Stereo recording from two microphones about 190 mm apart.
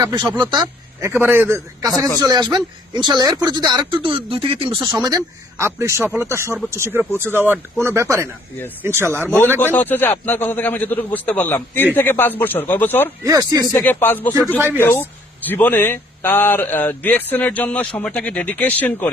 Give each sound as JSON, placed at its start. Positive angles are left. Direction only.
{"t": 0.0, "sound": "speech", "side_deg": -20}
{"t": 5.0, "sound": "speech", "side_deg": -15}
{"t": 9.6, "sound": "speech", "side_deg": 10}
{"t": 13.2, "sound": "speech", "side_deg": -20}
{"t": 13.7, "sound": "speech", "side_deg": 10}